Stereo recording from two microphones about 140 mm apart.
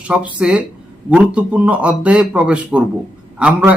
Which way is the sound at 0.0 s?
10° right (ahead or behind).